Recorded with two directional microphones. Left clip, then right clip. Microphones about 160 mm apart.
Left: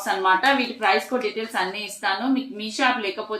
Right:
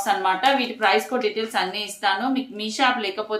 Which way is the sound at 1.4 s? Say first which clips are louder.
Right 2 dB; 25° right (ahead or behind).